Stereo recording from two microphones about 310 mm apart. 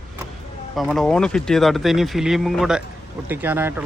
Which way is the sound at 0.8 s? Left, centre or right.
Centre.